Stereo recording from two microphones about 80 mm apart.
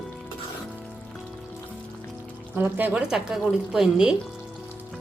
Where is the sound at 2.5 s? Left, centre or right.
Right.